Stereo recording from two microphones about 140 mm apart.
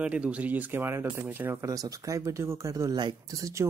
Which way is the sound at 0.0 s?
10° right (ahead or behind).